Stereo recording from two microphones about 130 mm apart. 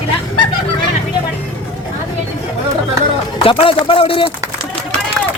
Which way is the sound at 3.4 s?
45° left (ahead or behind).